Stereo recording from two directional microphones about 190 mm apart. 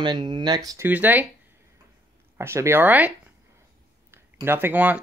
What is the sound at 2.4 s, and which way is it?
Speech, 15° right (ahead or behind).